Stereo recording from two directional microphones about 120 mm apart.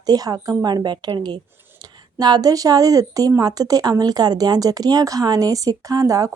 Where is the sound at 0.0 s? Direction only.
30° right (ahead or behind).